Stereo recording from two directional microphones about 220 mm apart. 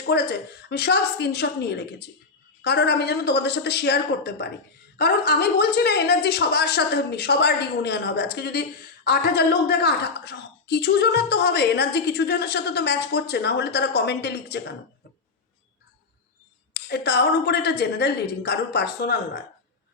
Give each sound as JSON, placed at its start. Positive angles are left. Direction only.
{"t": 0.0, "sound": "a woman's voice", "side_deg": 50}
{"t": 16.7, "sound": "a woman's voice", "side_deg": 50}